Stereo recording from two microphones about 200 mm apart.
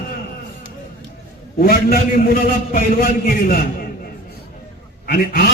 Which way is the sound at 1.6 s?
50° left (ahead or behind).